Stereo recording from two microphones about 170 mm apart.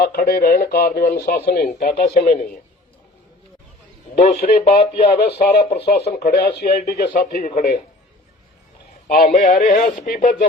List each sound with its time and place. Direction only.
0.0 s speech: 60° left (ahead or behind)
4.4 s speech: 65° left (ahead or behind)
4.7 s speech: 35° left (ahead or behind)
6.3 s speech: 80° left
6.7 s speech: 65° left (ahead or behind); by 7.8 s 50° left (ahead or behind)
9.0 s speech: 55° left (ahead or behind)